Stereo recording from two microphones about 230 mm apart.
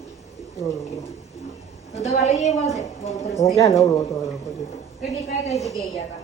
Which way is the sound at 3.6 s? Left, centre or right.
Centre.